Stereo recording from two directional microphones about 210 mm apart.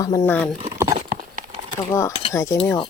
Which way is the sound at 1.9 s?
15° left (ahead or behind).